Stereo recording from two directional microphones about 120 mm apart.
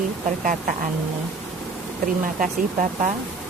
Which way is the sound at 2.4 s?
90° right.